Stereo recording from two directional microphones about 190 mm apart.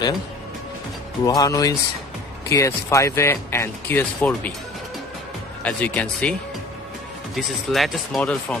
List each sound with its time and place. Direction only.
1.2 s speech: 20° left (ahead or behind)
5.6 s speech: 5° left (ahead or behind)
7.3 s speech: centre (ahead or behind)